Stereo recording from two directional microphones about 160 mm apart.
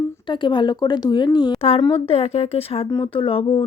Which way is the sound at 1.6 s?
40° left (ahead or behind).